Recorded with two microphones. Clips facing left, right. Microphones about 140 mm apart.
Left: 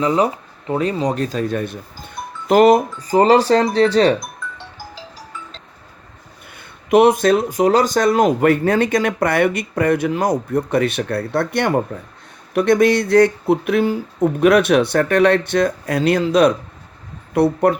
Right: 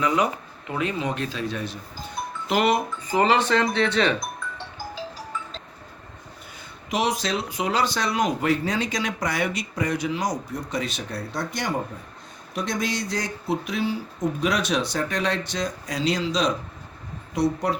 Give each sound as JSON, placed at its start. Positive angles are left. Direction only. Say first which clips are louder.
{"t": 0.0, "sound": "speech", "louder": "left 6 dB", "side_deg": 30}
{"t": 6.6, "sound": "speech", "louder": "left 13 dB", "side_deg": 55}